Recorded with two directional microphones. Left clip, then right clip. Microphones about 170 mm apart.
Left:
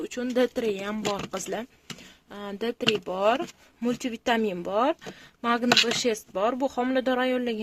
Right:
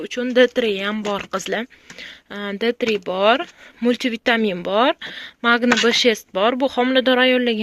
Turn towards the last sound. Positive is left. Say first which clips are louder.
# right 10 dB
turn(degrees=-20)  # may be behind; listen again after turning